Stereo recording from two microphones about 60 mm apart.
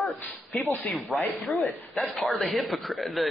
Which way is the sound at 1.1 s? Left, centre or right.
Centre.